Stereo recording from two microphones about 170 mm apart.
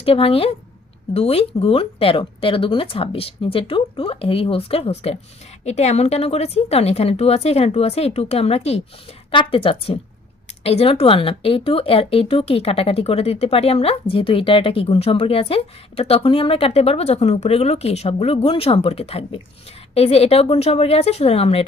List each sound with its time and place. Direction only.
0.0 s speech: 35° left (ahead or behind)